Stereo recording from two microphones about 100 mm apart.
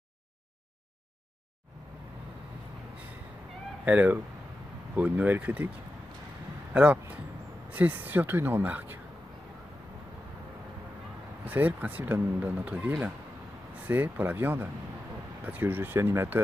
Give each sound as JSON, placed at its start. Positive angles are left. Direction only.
{"t": 3.8, "sound": "speech", "side_deg": -15}
{"t": 6.7, "sound": "speech", "side_deg": -15}
{"t": 11.4, "sound": "speech", "side_deg": -15}